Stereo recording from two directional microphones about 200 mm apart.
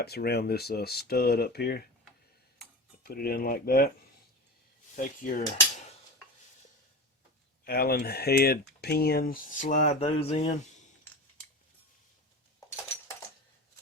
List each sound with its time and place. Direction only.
0.0 s speech: 50° left (ahead or behind)
3.0 s speech: 50° left (ahead or behind)
4.9 s speech: 40° left (ahead or behind)
7.6 s speech: 50° left (ahead or behind); by 10.5 s 30° left (ahead or behind)